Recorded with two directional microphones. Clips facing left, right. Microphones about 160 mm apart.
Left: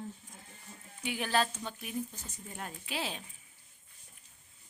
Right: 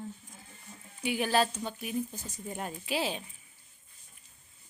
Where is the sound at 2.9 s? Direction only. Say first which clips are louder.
Right 6 dB; 5° right (ahead or behind).